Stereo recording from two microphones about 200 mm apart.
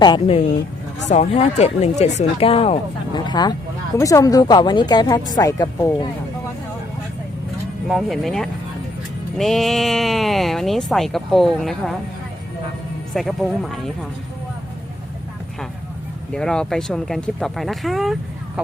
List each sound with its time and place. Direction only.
0.0 s speech: 25° left (ahead or behind)
7.9 s speech: centre (ahead or behind)
13.1 s speech: centre (ahead or behind)
16.3 s speech: 5° left (ahead or behind)